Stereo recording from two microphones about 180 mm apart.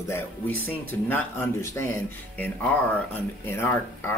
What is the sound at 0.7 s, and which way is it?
Speech, 10° left (ahead or behind).